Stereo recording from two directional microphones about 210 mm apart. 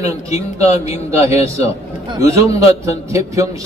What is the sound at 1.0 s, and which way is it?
A man's voice, 15° right (ahead or behind).